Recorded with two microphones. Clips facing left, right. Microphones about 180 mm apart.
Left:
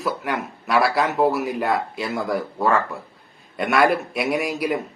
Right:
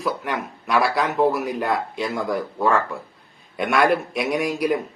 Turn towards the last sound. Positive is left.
turn(degrees=5)  # may be behind; listen again after turning